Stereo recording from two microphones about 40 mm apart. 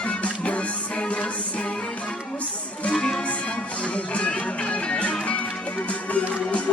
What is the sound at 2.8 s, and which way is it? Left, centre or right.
Music, left.